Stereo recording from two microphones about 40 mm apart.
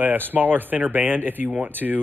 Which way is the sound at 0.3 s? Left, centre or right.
Right.